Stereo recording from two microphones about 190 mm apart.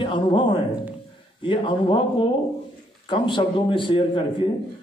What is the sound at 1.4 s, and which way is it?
Speech, 25° left (ahead or behind).